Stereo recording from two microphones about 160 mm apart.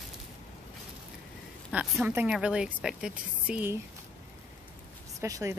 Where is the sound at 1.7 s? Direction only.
5° right (ahead or behind).